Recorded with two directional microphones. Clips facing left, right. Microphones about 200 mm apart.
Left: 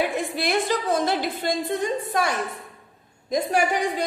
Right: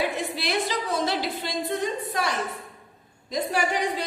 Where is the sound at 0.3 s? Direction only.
50° left (ahead or behind).